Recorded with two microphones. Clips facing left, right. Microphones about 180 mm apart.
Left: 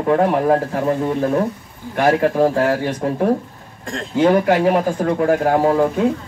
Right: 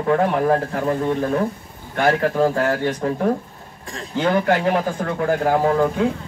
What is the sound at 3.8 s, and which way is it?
Speech, 90° left.